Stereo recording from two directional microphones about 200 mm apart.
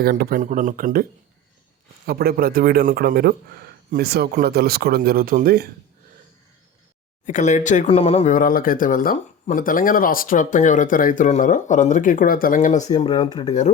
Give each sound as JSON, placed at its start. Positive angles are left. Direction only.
{"t": 0.0, "sound": "speech", "side_deg": -50}
{"t": 2.0, "sound": "speech", "side_deg": -50}
{"t": 7.3, "sound": "speech", "side_deg": 40}
{"t": 13.0, "sound": "speech", "side_deg": 20}